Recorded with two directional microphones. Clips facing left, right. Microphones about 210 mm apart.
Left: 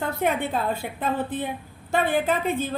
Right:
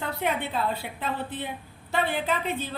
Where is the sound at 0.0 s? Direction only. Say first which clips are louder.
Left 4 dB; 45° left (ahead or behind).